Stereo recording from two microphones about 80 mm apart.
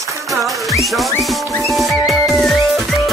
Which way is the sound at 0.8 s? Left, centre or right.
Centre.